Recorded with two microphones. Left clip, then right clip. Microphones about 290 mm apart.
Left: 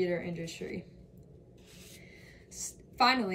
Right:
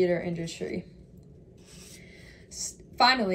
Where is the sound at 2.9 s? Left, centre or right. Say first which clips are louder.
Right 4 dB; centre.